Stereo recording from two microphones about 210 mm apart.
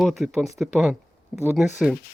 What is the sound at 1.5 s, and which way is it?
Speech, centre (ahead or behind).